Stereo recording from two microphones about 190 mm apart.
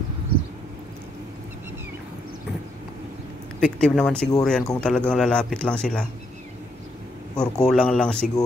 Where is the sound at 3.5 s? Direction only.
5° left (ahead or behind).